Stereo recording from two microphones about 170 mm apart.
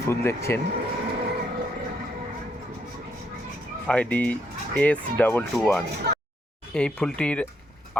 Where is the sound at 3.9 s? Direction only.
10° left (ahead or behind).